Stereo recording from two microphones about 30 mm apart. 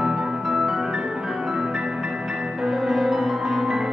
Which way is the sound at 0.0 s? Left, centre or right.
Centre.